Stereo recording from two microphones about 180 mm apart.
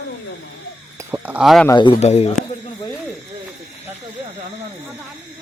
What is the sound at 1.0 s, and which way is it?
Speech, 15° right (ahead or behind).